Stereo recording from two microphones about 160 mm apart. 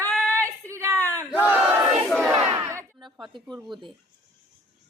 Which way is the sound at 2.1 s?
5° left (ahead or behind).